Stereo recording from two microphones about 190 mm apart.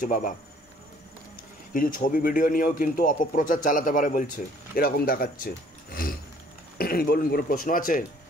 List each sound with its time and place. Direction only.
0.0 s a man's voice: 45° left (ahead or behind)
1.7 s a man's voice: 45° left (ahead or behind)